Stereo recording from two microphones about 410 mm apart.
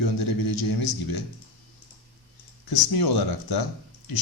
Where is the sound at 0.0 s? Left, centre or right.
Left.